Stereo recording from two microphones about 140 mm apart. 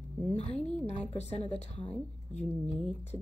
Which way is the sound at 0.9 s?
50° left (ahead or behind).